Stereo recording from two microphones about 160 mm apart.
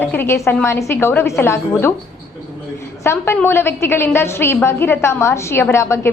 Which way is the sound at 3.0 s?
15° left (ahead or behind).